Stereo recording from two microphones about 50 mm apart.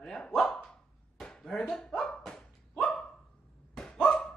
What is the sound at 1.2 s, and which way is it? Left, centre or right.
Dog, centre.